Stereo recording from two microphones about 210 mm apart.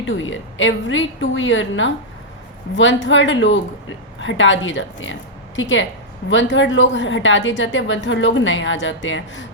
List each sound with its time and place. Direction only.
0.0 s a woman's voice: 65° left (ahead or behind)